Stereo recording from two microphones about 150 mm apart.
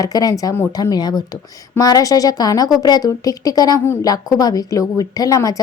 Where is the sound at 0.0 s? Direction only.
25° left (ahead or behind).